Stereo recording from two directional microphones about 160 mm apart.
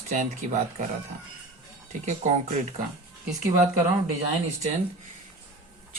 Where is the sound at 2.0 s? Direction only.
50° right (ahead or behind).